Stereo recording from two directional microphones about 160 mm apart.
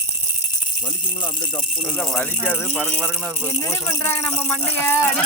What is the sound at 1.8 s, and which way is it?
Speech, centre (ahead or behind).